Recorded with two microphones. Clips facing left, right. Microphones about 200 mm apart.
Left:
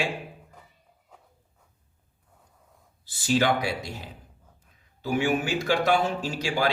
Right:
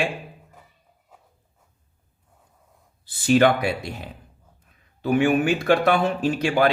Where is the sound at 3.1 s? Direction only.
60° right (ahead or behind).